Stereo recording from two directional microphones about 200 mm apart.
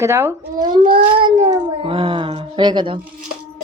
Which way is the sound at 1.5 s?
25° right (ahead or behind).